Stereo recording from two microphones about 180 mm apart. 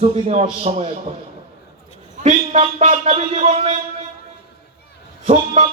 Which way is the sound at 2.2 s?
40° right (ahead or behind).